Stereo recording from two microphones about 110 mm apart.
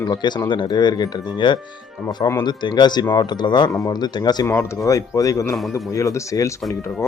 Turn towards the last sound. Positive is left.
turn(degrees=30)  # may be behind; listen again after turning